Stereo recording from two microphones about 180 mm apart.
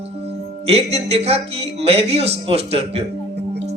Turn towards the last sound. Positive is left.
turn(degrees=-35)  # may be behind; listen again after turning